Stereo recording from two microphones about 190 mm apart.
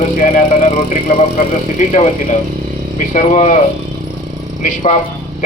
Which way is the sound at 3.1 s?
40° left (ahead or behind).